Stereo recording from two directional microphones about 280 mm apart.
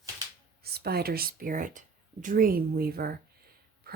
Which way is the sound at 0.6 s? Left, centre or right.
Right.